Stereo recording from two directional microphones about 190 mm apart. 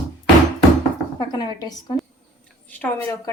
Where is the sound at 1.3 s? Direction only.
20° left (ahead or behind).